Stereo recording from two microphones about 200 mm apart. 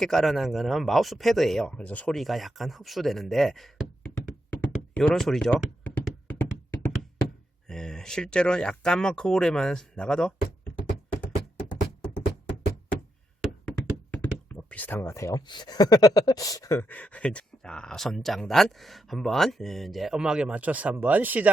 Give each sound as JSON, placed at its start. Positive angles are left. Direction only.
{"t": 0.0, "sound": "speech", "side_deg": 0}
{"t": 4.5, "sound": "knock", "side_deg": 5}
{"t": 7.7, "sound": "speech", "side_deg": 5}
{"t": 13.4, "sound": "speech", "side_deg": 5}